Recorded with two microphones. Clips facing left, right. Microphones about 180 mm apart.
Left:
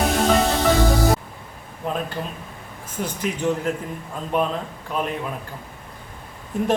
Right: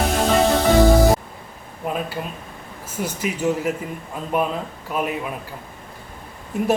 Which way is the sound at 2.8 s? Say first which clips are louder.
Right 1 dB; 5° right (ahead or behind).